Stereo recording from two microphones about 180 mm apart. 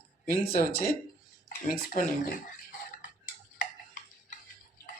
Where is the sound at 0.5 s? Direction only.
55° left (ahead or behind).